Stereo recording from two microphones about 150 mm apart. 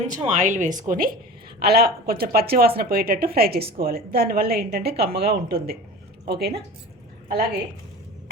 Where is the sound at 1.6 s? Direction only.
90° right.